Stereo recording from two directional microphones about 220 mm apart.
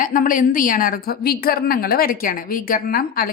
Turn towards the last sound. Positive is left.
turn(degrees=40)  # may be behind; listen again after turning